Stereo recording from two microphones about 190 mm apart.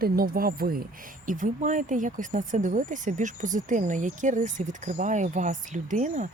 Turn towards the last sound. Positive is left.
turn(degrees=-40)  # may be behind; listen again after turning